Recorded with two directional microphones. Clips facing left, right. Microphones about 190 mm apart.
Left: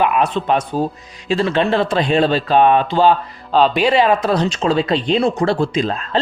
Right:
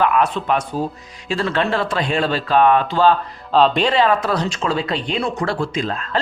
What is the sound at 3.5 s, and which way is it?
Speech, 5° left (ahead or behind).